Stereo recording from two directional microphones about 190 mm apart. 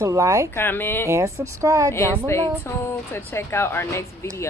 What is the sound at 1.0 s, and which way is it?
Speech, 15° right (ahead or behind).